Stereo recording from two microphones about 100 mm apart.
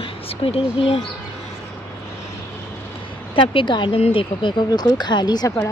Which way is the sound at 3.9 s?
90° left.